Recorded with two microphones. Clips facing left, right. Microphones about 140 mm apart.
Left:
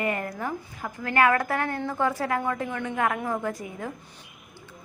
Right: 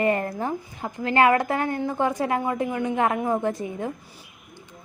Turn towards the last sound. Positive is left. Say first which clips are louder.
# right 5 dB
turn(degrees=-25)  # may be behind; listen again after turning